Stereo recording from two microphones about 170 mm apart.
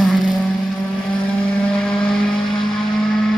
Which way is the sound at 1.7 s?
5° left (ahead or behind).